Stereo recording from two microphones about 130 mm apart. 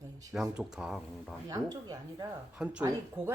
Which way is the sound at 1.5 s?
30° right (ahead or behind).